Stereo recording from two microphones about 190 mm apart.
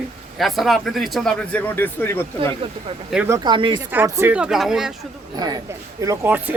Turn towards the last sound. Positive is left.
turn(degrees=-10)  # may be behind; listen again after turning